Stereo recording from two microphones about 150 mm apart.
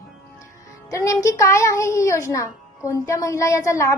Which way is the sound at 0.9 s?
20° left (ahead or behind).